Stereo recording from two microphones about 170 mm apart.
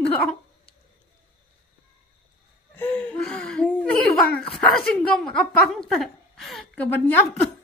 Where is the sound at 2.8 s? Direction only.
10° left (ahead or behind).